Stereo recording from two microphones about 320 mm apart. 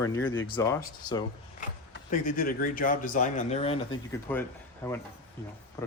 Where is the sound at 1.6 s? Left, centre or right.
Left.